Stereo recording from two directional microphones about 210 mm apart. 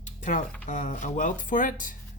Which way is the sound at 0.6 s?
35° left (ahead or behind).